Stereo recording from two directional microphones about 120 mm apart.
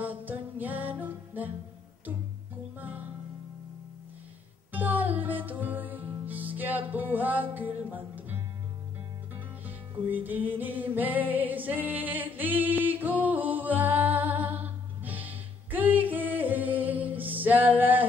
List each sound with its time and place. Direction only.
0.0 s music: 15° right (ahead or behind)
2.8 s music: 15° right (ahead or behind)
4.7 s music: 15° right (ahead or behind)
9.7 s music: 15° right (ahead or behind)
10.5 s singing: 15° right (ahead or behind)